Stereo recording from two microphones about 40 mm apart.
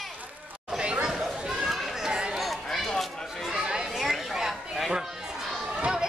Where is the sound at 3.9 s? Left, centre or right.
Centre.